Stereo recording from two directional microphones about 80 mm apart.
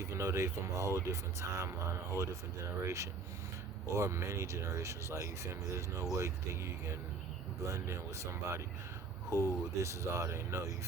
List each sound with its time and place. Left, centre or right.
0.0 s speech: right